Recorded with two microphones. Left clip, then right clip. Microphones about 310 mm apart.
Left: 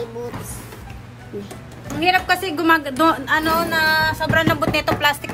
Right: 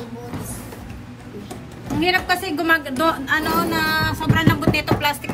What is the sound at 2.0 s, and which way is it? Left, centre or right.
A woman's voice, centre.